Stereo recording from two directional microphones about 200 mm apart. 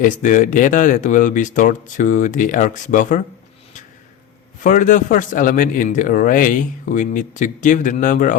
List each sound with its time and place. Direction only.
0.0 s a man's voice: 40° left (ahead or behind)
4.6 s a man's voice: 40° left (ahead or behind)